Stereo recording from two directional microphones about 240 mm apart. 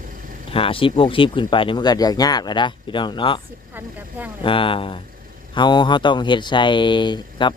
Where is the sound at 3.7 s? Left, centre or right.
Centre.